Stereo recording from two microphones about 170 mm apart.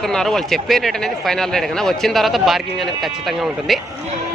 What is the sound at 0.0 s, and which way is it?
Speech, 5° left (ahead or behind).